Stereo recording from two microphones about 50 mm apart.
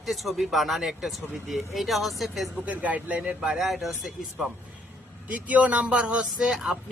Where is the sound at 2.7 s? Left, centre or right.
Right.